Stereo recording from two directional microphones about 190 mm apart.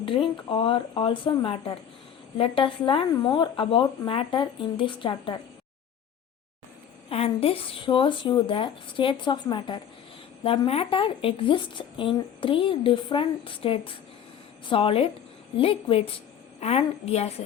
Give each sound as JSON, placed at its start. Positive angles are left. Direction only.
{"t": 0.0, "sound": "a woman's voice", "side_deg": 25}
{"t": 7.1, "sound": "a woman's voice", "side_deg": 30}